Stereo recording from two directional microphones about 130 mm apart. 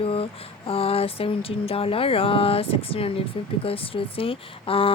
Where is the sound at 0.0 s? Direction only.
45° left (ahead or behind).